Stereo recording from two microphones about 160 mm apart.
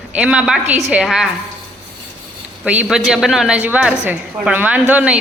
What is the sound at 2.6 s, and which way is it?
A woman's voice, 5° right (ahead or behind).